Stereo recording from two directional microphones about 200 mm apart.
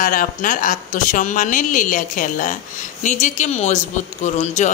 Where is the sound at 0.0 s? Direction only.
45° left (ahead or behind).